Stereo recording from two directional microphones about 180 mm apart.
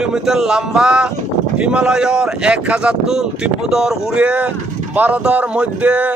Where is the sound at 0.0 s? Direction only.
5° right (ahead or behind).